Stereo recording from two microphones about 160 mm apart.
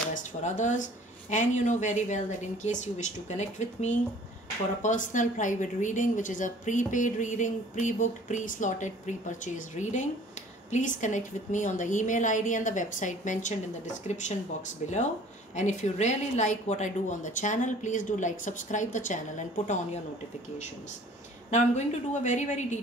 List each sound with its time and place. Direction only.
0.1 s a sound: 50° left (ahead or behind)
1.3 s a woman's voice: 50° left (ahead or behind)
15.5 s a woman's voice: 45° left (ahead or behind)
21.5 s a woman's voice: 45° left (ahead or behind)